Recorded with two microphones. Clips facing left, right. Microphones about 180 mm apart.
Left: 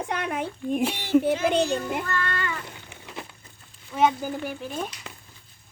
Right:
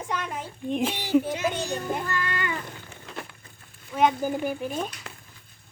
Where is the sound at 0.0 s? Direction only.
65° left (ahead or behind).